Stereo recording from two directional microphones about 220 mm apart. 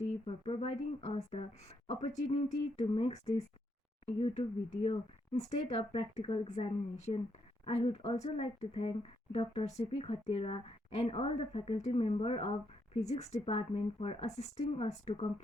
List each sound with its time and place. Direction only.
0.3 s speech: 25° left (ahead or behind)